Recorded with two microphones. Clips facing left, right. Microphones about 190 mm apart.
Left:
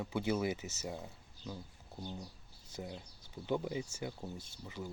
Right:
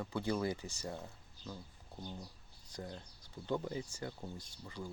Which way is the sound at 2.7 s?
10° left (ahead or behind).